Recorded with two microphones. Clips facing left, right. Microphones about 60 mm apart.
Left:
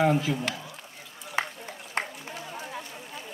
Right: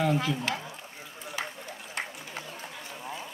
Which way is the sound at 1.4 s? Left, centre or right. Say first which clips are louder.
Left 7 dB; left.